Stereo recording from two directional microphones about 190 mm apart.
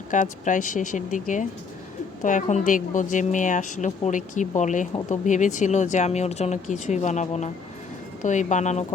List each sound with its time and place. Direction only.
0.1 s a woman's voice: 40° left (ahead or behind)